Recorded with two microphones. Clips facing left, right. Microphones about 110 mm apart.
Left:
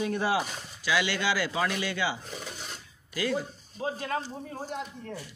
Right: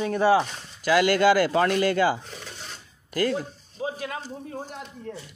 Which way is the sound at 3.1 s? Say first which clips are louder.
Right 5 dB; 50° right (ahead or behind).